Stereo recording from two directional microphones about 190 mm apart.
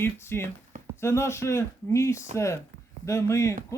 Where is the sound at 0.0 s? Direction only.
15° left (ahead or behind).